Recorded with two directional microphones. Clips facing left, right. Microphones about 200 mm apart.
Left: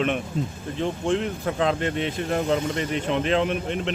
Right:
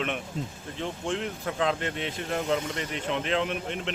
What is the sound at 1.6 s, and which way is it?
Speech, 40° left (ahead or behind).